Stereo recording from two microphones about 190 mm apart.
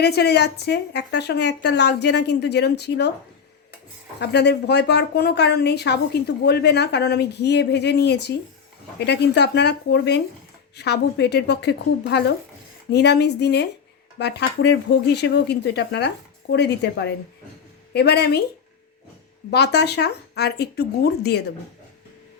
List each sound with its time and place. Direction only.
0.0 s a woman's voice: 60° left (ahead or behind)
4.2 s a woman's voice: 60° left (ahead or behind)
19.5 s a woman's voice: 60° left (ahead or behind)